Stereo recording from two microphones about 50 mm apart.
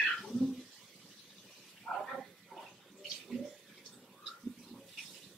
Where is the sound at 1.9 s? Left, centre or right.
Centre.